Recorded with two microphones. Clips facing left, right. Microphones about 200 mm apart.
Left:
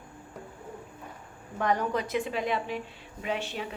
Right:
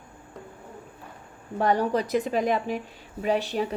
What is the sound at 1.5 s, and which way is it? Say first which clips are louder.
A woman's voice: right 5 dB; 35° right (ahead or behind).